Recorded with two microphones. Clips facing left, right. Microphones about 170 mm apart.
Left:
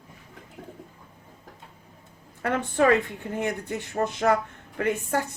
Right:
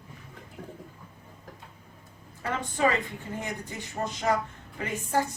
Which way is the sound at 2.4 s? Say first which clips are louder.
Left 5 dB; 60° left (ahead or behind).